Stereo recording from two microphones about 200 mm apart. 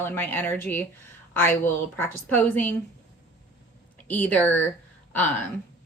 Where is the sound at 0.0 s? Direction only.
10° left (ahead or behind).